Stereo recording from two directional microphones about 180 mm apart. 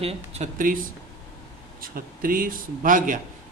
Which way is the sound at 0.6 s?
50° right (ahead or behind).